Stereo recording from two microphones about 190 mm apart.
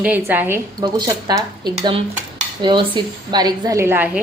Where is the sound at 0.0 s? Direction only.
10° right (ahead or behind).